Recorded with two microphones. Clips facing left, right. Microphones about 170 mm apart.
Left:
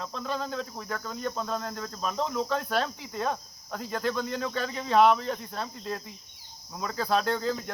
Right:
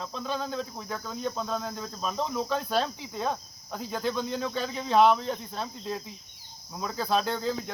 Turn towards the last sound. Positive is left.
turn(degrees=0)  # may be behind; listen again after turning